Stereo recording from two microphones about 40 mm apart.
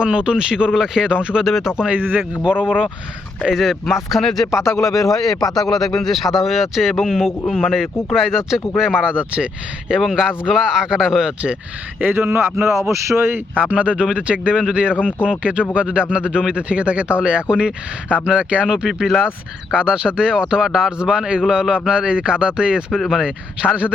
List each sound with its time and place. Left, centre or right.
0.0 s speech: right
1.1 s speech: right
1.9 s speech: right
2.4 s speech: right
3.5 s speech: centre; by 9.5 s right
10.1 s speech: centre
12.1 s speech: right
13.6 s speech: right; by 19.3 s centre
19.7 s speech: right
21.0 s speech: right
22.9 s speech: centre
23.2 s speech: right